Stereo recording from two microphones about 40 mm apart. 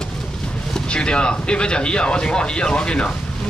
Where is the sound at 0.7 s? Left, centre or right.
Left.